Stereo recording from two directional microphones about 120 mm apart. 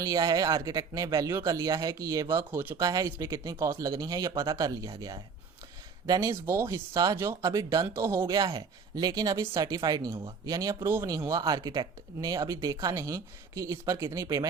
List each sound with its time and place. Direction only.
0.0 s speech: 30° right (ahead or behind)
8.3 s speech: 40° right (ahead or behind)